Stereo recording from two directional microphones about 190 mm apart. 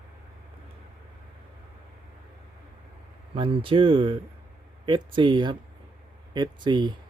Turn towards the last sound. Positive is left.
turn(degrees=-25)  # may be behind; listen again after turning